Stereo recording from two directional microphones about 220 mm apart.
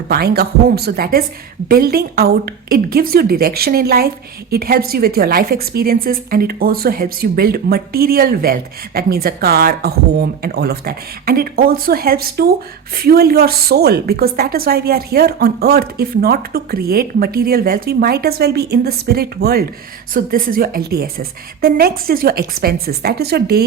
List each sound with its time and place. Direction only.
0.1 s a woman's voice: 45° right (ahead or behind)